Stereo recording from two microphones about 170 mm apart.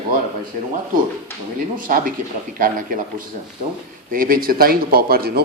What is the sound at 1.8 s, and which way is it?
Speech, 55° right (ahead or behind).